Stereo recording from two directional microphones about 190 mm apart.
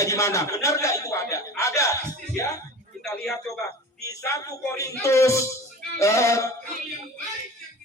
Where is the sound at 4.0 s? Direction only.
15° left (ahead or behind).